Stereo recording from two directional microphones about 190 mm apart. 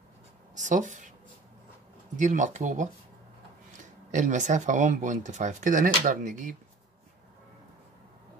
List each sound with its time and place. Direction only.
0.6 s speech: 40° right (ahead or behind)
2.1 s speech: 40° right (ahead or behind)
4.1 s speech: 40° right (ahead or behind)